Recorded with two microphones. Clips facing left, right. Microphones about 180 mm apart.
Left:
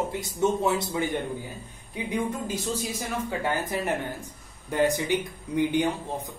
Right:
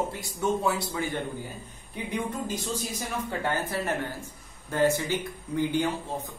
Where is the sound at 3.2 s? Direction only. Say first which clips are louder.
Left 1 dB; 15° left (ahead or behind).